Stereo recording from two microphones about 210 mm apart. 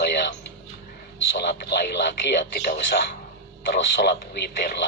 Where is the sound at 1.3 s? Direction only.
55° left (ahead or behind).